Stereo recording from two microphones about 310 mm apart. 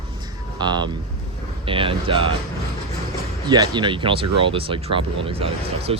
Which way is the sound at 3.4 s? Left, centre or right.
Centre.